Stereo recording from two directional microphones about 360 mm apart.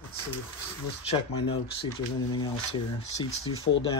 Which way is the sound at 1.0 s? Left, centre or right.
Centre.